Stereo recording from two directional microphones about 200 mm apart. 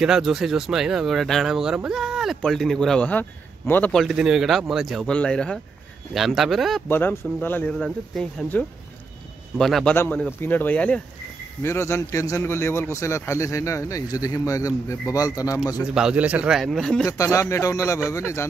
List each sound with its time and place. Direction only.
0.0 s a man's voice: centre (ahead or behind); by 15.6 s 15° left (ahead or behind)
15.8 s speech: 5° right (ahead or behind)
17.0 s a man's voice: 15° left (ahead or behind)